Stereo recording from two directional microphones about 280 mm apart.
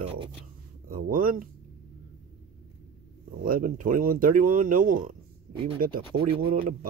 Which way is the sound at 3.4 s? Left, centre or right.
Right.